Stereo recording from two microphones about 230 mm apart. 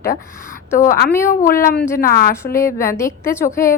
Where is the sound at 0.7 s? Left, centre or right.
Left.